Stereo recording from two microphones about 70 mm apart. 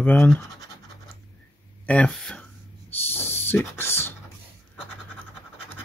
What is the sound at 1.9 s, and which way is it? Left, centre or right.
Speech, centre.